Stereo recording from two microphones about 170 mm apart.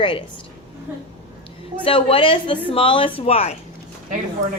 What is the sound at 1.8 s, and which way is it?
A woman's voice, 30° left (ahead or behind).